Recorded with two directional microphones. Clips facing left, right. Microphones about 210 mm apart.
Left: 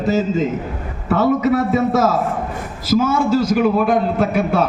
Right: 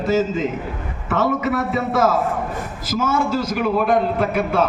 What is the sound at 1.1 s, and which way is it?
Speech, 40° left (ahead or behind).